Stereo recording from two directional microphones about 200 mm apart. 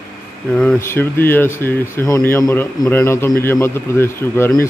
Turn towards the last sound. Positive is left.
turn(degrees=10)  # may be behind; listen again after turning